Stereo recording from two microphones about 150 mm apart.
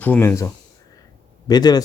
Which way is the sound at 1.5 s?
25° left (ahead or behind).